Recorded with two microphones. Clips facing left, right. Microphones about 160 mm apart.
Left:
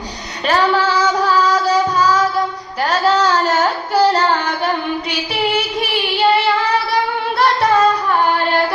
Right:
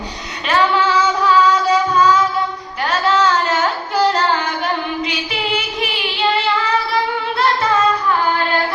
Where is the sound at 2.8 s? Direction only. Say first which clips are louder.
Left 1 dB; 35° left (ahead or behind).